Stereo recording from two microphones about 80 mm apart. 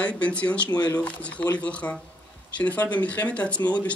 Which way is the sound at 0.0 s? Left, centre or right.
Centre.